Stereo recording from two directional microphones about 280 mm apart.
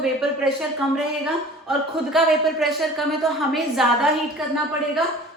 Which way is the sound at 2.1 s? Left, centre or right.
Centre.